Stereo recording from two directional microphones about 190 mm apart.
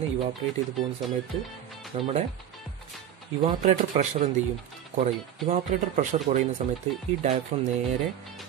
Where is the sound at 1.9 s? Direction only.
35° right (ahead or behind).